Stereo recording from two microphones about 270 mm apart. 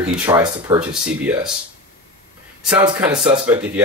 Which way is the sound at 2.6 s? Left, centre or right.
Centre.